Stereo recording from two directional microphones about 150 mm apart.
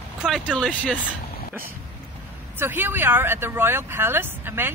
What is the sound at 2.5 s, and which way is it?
Speech, 15° right (ahead or behind).